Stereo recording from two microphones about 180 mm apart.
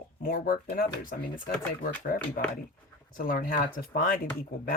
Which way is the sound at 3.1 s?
50° left (ahead or behind).